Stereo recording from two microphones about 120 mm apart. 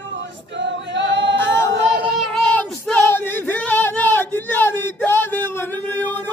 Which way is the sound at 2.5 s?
15° left (ahead or behind).